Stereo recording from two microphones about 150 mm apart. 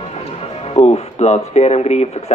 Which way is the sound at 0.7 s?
45° left (ahead or behind).